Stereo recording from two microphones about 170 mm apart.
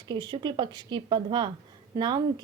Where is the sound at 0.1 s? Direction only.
25° right (ahead or behind).